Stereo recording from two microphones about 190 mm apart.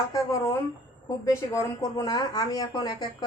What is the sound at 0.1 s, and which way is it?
Speech, 15° left (ahead or behind).